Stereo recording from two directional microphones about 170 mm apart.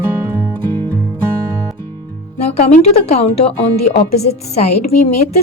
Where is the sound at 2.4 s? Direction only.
40° left (ahead or behind).